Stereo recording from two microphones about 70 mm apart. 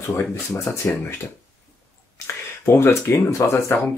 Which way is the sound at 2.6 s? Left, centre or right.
Left.